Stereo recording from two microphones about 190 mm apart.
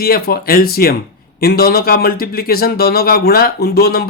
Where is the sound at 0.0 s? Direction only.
55° left (ahead or behind).